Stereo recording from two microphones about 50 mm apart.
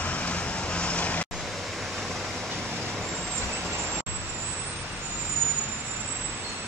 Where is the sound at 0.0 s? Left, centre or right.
Left.